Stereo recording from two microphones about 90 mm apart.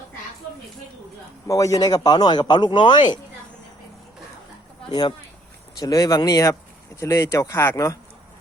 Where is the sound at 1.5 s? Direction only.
35° left (ahead or behind); by 3.2 s 55° left (ahead or behind).